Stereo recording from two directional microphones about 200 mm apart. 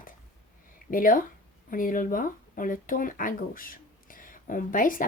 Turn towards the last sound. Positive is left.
turn(degrees=45)  # may be behind; listen again after turning